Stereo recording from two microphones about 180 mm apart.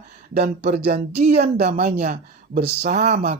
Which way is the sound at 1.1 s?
35° right (ahead or behind).